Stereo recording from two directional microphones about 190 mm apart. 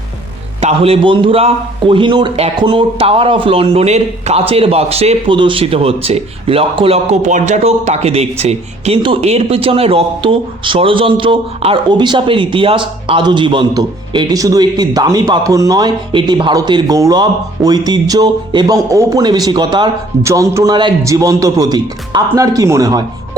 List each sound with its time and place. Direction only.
0.6 s a man's voice: 30° right (ahead or behind)